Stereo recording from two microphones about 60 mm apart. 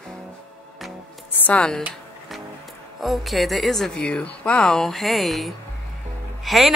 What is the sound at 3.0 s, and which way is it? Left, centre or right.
A woman's voice, centre.